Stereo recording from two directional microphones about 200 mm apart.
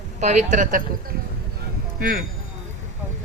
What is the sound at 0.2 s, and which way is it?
Speech, 35° right (ahead or behind).